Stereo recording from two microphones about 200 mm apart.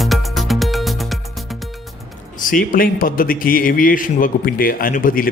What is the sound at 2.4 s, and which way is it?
A man's voice, 45° left (ahead or behind).